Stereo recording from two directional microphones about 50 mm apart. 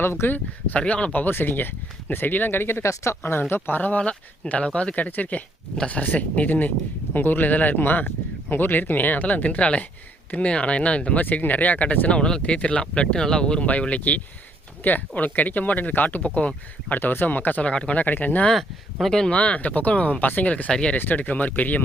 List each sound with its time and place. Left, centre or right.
0.0 s speech: left
0.8 s speech: left
1.2 s speech: left
3.5 s speech: left
5.7 s speech: centre
6.0 s speech: left
12.1 s speech: centre
17.0 s speech: left
17.6 s speech: left
18.0 s speech: left
18.5 s speech: centre
19.3 s speech: left